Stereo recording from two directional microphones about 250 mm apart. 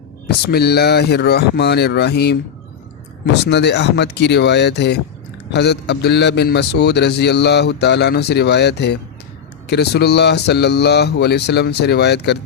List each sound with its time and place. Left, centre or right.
0.3 s speech: left
3.4 s a man's voice: left